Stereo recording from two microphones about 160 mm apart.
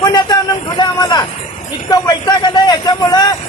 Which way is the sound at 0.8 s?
25° left (ahead or behind).